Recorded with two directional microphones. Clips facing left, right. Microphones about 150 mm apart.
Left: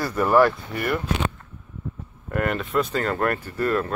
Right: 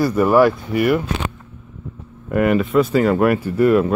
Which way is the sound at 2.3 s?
5° right (ahead or behind).